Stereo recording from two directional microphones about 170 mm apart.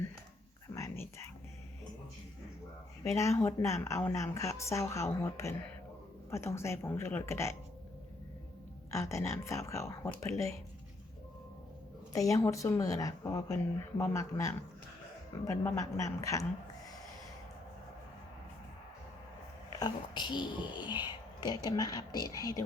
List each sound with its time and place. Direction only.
0.7 s a sound: 15° left (ahead or behind)
3.0 s a woman's voice: 15° left (ahead or behind)
8.9 s a woman's voice: 15° left (ahead or behind)
12.1 s a woman's voice: 20° left (ahead or behind)
19.8 s a woman's voice: 25° left (ahead or behind)